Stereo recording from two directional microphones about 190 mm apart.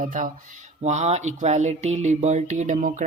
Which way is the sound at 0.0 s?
40° right (ahead or behind).